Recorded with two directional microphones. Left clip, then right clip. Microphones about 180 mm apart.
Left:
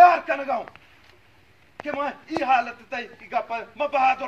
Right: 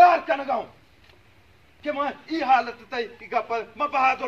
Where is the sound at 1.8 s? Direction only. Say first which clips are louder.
Right 1 dB; 25° left (ahead or behind).